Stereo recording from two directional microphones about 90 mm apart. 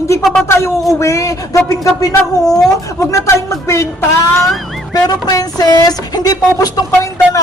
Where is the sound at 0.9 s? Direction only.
35° left (ahead or behind).